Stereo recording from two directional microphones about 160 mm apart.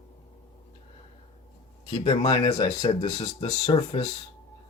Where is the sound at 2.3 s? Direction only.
45° left (ahead or behind).